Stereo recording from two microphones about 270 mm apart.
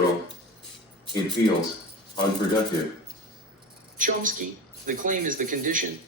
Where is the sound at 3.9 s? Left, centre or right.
Right.